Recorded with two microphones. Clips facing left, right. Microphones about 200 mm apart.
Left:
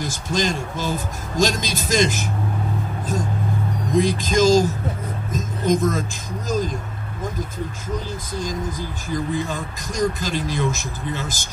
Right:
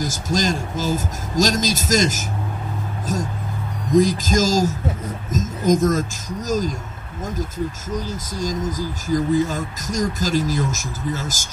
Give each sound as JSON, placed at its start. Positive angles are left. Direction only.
{"t": 0.0, "sound": "speech", "side_deg": -40}
{"t": 4.0, "sound": "speech", "side_deg": -45}
{"t": 8.4, "sound": "speech", "side_deg": -40}